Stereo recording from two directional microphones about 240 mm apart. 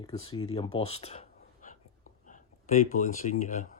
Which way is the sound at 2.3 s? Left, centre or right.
Left.